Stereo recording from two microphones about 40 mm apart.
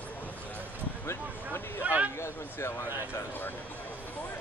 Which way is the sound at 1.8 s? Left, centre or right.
Right.